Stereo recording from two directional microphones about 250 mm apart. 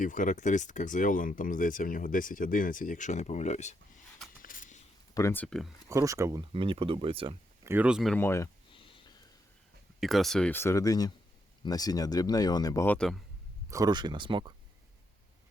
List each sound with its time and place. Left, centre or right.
0.0 s speech: left
4.4 s a sound: left
5.1 s speech: centre
5.9 s speech: centre
7.6 s speech: centre
10.0 s speech: centre
13.7 s speech: centre